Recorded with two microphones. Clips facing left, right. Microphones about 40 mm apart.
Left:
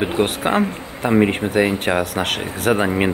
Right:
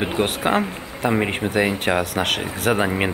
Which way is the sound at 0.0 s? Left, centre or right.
Centre.